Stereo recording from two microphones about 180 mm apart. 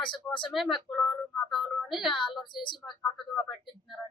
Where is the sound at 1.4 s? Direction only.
Centre (ahead or behind).